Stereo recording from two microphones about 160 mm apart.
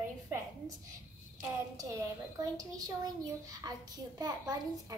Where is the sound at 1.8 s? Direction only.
20° right (ahead or behind).